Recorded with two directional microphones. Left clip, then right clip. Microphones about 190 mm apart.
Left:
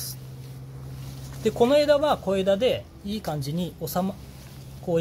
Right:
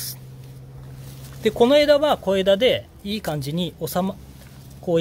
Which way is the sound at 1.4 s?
25° right (ahead or behind).